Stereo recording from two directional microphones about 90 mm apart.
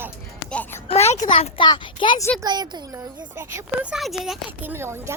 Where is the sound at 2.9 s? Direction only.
30° right (ahead or behind).